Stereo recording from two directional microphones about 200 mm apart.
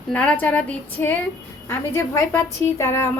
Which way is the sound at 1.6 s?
10° left (ahead or behind).